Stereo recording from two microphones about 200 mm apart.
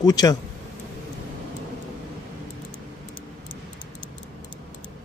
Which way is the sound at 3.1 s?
25° left (ahead or behind).